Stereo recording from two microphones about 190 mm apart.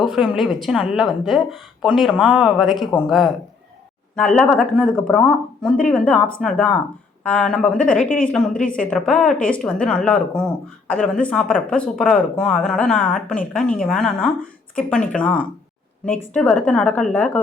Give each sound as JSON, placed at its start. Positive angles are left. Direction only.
{"t": 0.0, "sound": "speech", "side_deg": -5}
{"t": 8.0, "sound": "a woman's voice", "side_deg": 45}
{"t": 8.3, "sound": "a woman's voice", "side_deg": 5}